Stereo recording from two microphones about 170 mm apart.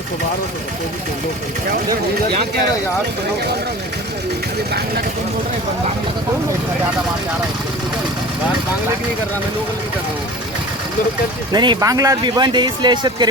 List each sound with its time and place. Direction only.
11.5 s speech: 25° right (ahead or behind)